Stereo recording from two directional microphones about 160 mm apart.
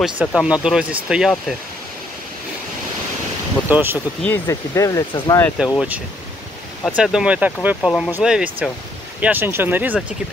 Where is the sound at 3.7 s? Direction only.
10° right (ahead or behind).